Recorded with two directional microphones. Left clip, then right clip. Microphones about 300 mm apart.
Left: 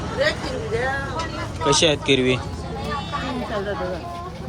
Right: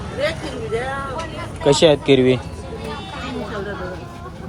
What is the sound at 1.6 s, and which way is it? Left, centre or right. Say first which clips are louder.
Speech: right 4 dB; centre.